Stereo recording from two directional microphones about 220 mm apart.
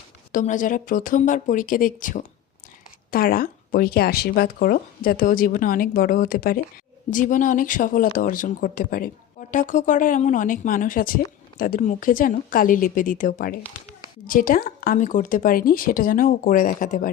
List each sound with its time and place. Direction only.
0.3 s speech: 35° left (ahead or behind)